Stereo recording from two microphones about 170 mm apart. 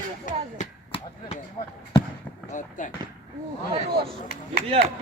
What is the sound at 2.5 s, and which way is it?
Speech, 50° left (ahead or behind).